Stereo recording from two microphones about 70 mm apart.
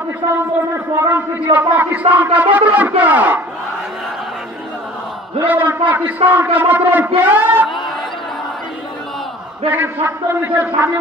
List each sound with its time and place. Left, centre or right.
0.9 s a man's voice: right
1.7 s speech: right
5.4 s speech: right
9.7 s speech: right